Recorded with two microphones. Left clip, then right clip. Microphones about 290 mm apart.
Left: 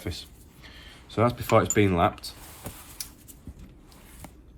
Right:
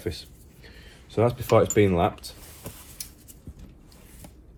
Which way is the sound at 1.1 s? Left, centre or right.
Left.